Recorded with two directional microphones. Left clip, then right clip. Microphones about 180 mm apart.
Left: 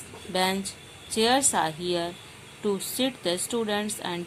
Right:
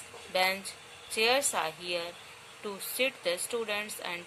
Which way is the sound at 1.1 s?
45° left (ahead or behind).